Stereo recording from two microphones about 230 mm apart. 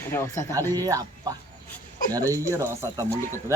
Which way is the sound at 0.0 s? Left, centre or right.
Centre.